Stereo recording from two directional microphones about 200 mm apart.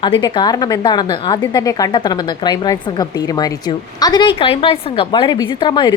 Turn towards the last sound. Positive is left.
turn(degrees=20)  # may be behind; listen again after turning